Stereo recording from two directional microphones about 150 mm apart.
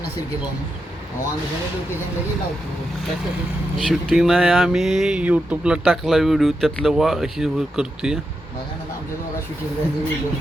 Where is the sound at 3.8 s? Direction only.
Centre (ahead or behind).